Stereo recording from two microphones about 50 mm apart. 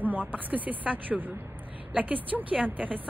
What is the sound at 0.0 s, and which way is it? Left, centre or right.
A woman's voice, right.